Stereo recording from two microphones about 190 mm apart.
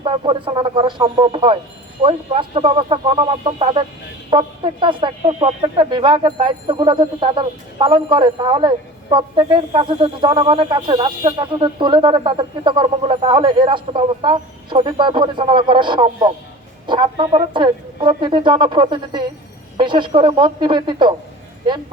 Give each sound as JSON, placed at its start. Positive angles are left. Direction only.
{"t": 0.0, "sound": "speech", "side_deg": -25}